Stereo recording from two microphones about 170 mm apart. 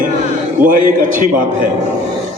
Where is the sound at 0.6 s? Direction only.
50° right (ahead or behind).